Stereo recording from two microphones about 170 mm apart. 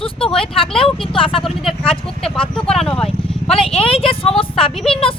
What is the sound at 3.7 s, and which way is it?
Speech, 35° left (ahead or behind).